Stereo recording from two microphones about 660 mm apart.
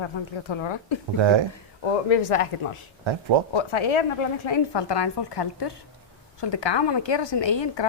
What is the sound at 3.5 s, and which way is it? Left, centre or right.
A woman's voice, left.